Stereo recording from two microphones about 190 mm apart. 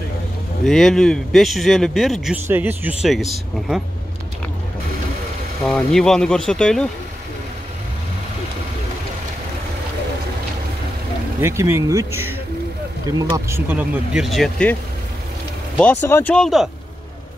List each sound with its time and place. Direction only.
0.7 s speech: centre (ahead or behind)
5.7 s speech: 5° left (ahead or behind)
11.4 s speech: 15° right (ahead or behind)
13.7 s speech: 5° right (ahead or behind)
15.8 s speech: 10° left (ahead or behind)